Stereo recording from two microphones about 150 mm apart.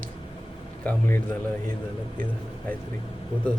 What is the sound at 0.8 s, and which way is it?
Speech, 15° left (ahead or behind).